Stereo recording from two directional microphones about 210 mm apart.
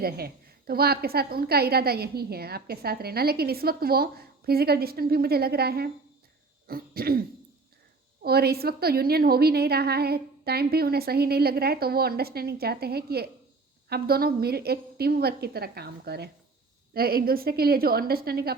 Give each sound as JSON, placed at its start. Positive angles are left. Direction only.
{"t": 0.7, "sound": "a woman's voice", "side_deg": -45}
{"t": 8.2, "sound": "a woman's voice", "side_deg": -50}